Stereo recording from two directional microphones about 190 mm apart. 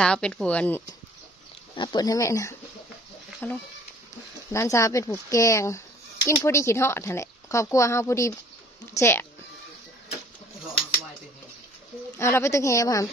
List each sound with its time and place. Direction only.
0.0 s speech: 5° left (ahead or behind)
1.8 s speech: 20° left (ahead or behind)
12.2 s speech: 15° left (ahead or behind)